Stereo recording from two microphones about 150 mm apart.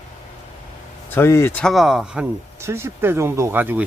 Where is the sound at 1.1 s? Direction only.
15° left (ahead or behind).